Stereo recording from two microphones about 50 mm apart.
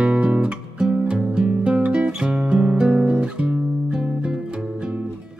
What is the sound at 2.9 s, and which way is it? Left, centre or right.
Guitar, right.